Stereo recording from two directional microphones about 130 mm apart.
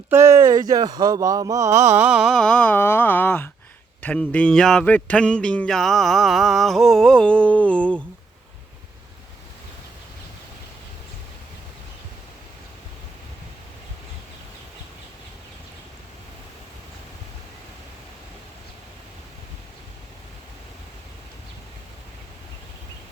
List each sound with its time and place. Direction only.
0.1 s speech: 20° right (ahead or behind)
2.0 s speech: centre (ahead or behind)